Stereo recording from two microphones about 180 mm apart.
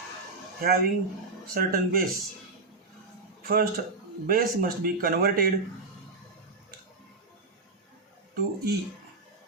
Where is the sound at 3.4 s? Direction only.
55° right (ahead or behind).